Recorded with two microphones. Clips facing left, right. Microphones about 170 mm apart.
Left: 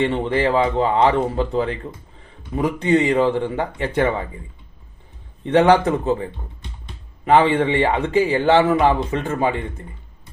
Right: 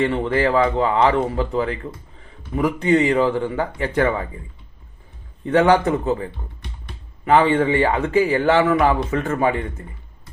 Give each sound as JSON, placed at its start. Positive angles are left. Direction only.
{"t": 0.0, "sound": "speech", "side_deg": 25}
{"t": 5.5, "sound": "speech", "side_deg": 25}